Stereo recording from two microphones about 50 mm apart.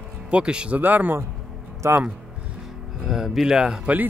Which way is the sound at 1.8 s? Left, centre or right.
Right.